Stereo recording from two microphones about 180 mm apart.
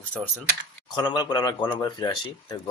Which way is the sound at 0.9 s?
25° left (ahead or behind).